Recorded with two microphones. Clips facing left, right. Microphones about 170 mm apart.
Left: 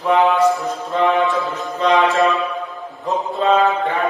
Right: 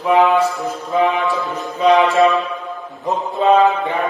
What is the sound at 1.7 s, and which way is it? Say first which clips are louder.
Music: right 3 dB; 10° right (ahead or behind).